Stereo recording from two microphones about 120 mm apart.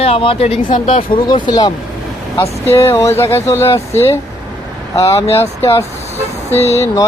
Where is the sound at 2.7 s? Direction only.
20° left (ahead or behind).